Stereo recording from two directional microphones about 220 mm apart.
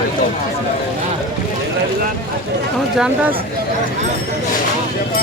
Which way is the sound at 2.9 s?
5° right (ahead or behind).